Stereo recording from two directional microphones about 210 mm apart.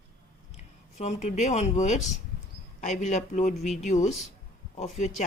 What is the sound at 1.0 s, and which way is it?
A woman's voice, 35° left (ahead or behind).